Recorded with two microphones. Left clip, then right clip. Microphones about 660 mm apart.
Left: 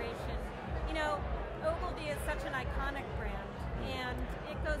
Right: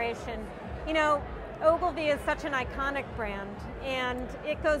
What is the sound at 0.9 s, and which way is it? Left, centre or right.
Speech, right.